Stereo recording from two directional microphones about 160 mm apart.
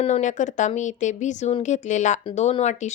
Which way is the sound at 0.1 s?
50° left (ahead or behind).